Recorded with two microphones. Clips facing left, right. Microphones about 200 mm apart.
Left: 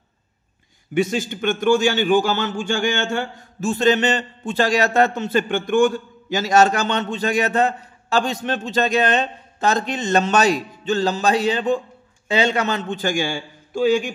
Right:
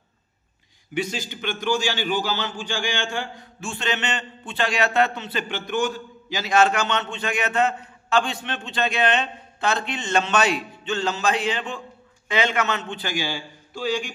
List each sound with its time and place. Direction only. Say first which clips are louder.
0.9 s a man's voice: left 7 dB; 50° left (ahead or behind)